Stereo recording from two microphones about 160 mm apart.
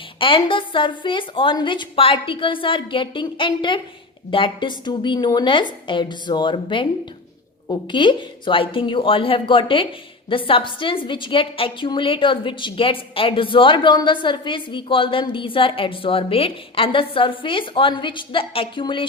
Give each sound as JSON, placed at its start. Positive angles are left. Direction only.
{"t": 0.2, "sound": "a woman's voice", "side_deg": 35}